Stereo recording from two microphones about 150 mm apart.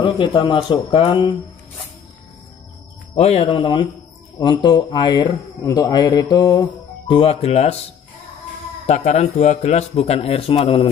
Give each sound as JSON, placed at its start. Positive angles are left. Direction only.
{"t": 0.0, "sound": "speech", "side_deg": 35}
{"t": 3.2, "sound": "speech", "side_deg": 45}
{"t": 8.8, "sound": "a man's voice", "side_deg": 50}